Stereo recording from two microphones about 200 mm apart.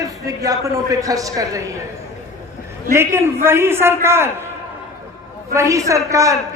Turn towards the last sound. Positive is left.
turn(degrees=-15)  # may be behind; listen again after turning